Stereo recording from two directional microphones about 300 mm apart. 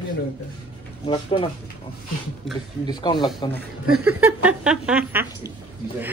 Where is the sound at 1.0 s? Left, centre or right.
Centre.